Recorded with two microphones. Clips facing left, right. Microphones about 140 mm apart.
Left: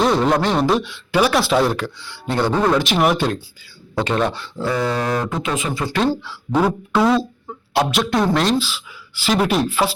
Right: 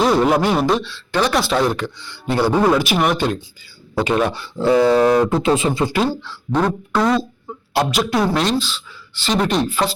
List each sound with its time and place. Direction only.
0.0 s speech: 5° right (ahead or behind)
0.8 s speech: 15° left (ahead or behind); by 4.4 s 5° right (ahead or behind)
4.5 s speech: 25° right (ahead or behind)
6.2 s speech: 5° left (ahead or behind)